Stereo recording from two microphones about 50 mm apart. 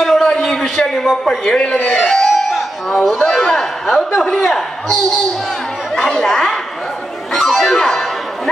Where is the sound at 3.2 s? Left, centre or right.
Centre.